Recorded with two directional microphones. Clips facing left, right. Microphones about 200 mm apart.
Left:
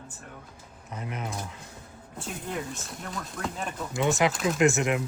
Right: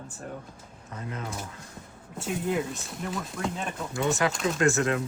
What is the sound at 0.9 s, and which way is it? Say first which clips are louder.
Speech: left 1 dB; 20° left (ahead or behind).